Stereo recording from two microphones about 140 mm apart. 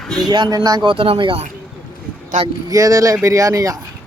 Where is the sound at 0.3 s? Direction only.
30° right (ahead or behind).